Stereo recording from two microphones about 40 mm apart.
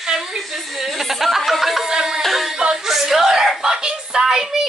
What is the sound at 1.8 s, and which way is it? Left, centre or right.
Music, centre.